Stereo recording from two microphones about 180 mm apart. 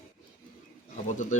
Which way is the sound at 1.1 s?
40° left (ahead or behind).